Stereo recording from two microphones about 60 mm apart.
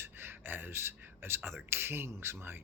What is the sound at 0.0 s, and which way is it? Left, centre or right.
A man's voice, right.